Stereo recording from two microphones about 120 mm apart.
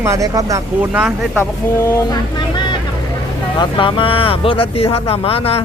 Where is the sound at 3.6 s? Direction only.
45° left (ahead or behind).